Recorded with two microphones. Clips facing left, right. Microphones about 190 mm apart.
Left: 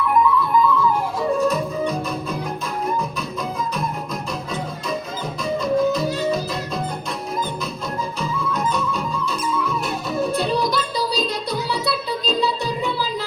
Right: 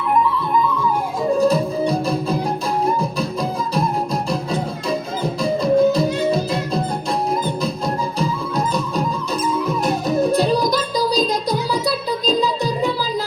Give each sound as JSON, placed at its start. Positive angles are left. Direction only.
{"t": 1.4, "sound": "music", "side_deg": -30}